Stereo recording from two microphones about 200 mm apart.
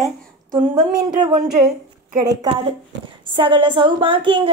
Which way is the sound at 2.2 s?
25° right (ahead or behind).